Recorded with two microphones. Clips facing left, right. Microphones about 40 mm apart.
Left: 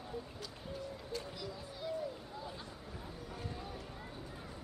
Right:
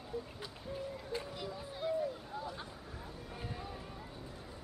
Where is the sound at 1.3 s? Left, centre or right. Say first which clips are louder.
Right 2 dB; right.